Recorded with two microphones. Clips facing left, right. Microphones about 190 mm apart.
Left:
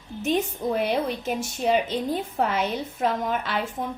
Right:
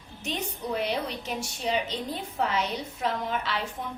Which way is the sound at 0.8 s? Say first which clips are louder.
Left 5 dB; 50° left (ahead or behind).